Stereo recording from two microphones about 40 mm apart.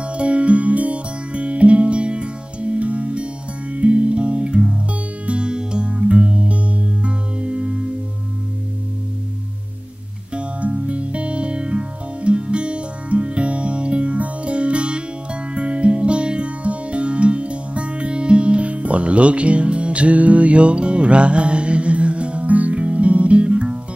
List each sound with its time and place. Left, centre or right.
0.0 s music: right
10.3 s music: right